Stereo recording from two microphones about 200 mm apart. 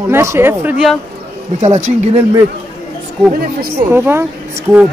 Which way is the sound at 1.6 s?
35° right (ahead or behind).